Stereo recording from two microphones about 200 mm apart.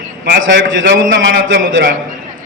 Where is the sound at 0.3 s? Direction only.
70° right (ahead or behind).